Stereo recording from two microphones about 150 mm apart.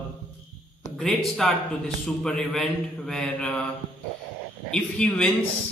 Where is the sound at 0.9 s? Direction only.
Centre (ahead or behind).